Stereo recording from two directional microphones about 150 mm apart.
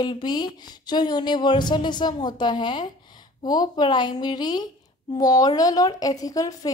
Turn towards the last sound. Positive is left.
turn(degrees=25)  # may be behind; listen again after turning